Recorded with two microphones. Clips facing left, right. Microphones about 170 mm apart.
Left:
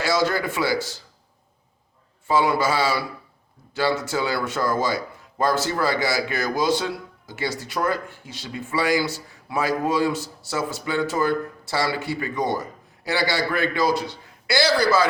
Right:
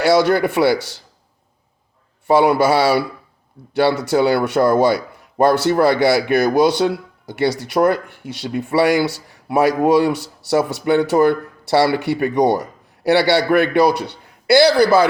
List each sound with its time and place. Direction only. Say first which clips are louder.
0.0 s a man's voice: right 8 dB; 65° right (ahead or behind)
2.2 s a man's voice: right 7 dB; 60° right (ahead or behind)